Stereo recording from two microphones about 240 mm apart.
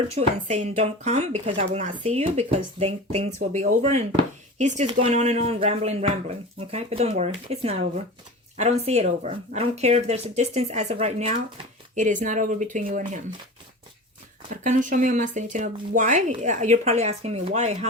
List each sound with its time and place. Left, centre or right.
0.2 s speech: right
14.5 s speech: right